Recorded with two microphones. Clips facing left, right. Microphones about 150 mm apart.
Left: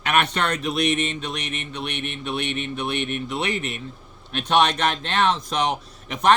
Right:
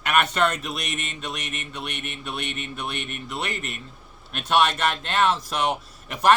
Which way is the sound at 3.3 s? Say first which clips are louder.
Left 5 dB; centre (ahead or behind).